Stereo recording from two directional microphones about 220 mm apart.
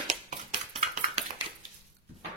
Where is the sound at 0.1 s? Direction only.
35° right (ahead or behind).